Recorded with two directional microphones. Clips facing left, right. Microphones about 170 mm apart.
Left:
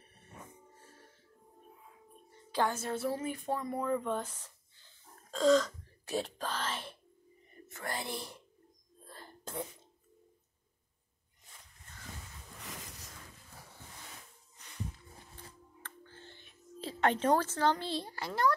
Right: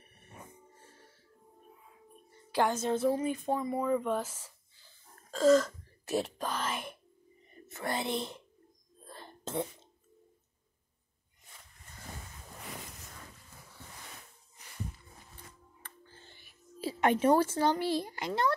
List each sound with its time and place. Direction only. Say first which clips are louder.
2.5 s speech: right 4 dB; 15° right (ahead or behind)
9.0 s whispering: right 4 dB; 25° right (ahead or behind)
15.8 s music: left 3 dB; 10° right (ahead or behind)